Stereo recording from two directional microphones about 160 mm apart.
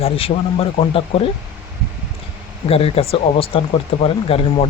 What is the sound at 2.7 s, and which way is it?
Speech, 35° left (ahead or behind).